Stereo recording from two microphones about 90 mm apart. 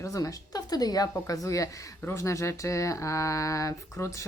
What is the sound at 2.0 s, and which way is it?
Speech, 30° left (ahead or behind).